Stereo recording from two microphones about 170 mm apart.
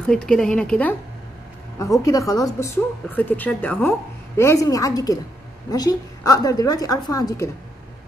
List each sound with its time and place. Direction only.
0.0 s speech: 5° left (ahead or behind)
1.8 s a woman's voice: 20° left (ahead or behind)